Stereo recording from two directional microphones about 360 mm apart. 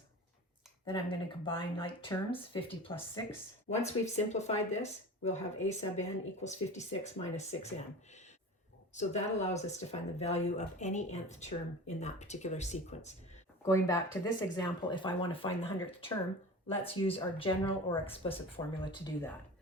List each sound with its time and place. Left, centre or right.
0.9 s speech: centre
9.0 s speech: centre